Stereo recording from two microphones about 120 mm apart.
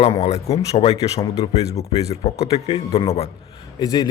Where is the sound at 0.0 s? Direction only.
65° left (ahead or behind).